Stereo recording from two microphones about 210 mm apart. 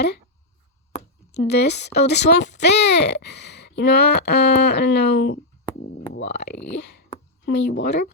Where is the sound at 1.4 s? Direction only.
55° left (ahead or behind).